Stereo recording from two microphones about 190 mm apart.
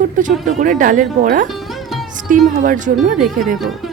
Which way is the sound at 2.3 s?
45° right (ahead or behind).